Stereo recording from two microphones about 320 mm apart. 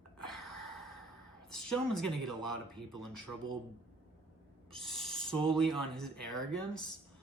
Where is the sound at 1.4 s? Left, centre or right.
Centre.